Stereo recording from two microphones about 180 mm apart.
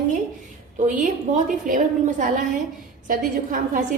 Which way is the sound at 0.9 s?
45° right (ahead or behind).